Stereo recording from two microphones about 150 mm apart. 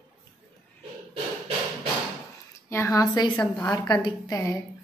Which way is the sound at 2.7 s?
20° left (ahead or behind).